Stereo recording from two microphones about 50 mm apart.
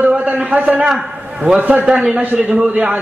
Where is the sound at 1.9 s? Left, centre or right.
Right.